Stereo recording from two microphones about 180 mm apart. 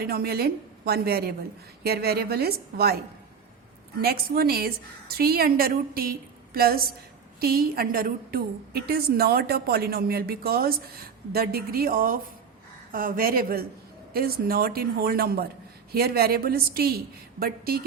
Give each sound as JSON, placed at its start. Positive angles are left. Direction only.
{"t": 0.0, "sound": "a woman's voice", "side_deg": -60}
{"t": 4.0, "sound": "a woman's voice", "side_deg": -60}